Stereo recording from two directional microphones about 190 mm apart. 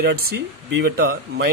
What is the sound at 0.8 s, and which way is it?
Speech, 60° right (ahead or behind).